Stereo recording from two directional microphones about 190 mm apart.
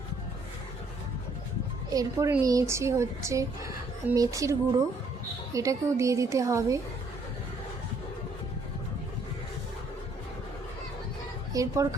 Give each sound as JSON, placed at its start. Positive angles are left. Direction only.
{"t": 1.9, "sound": "a woman's voice", "side_deg": -20}
{"t": 5.5, "sound": "a woman's voice", "side_deg": -15}
{"t": 11.5, "sound": "a woman's voice", "side_deg": -15}